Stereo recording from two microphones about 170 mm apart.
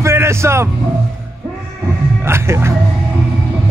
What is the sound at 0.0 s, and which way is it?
Vehicle, 15° right (ahead or behind).